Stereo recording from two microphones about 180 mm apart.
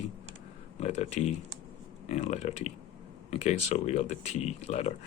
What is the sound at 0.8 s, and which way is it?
Speech, 35° left (ahead or behind).